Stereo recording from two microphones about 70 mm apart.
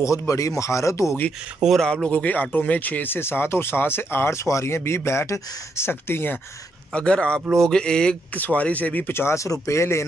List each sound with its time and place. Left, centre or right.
0.3 s speech: left
1.6 s speech: centre
2.0 s speech: left
6.9 s speech: centre
9.1 s speech: left